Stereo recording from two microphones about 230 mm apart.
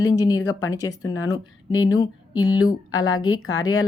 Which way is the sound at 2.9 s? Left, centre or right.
Left.